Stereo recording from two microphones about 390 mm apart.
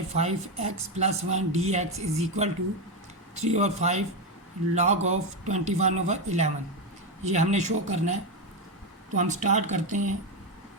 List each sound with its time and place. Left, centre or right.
0.2 s speech: centre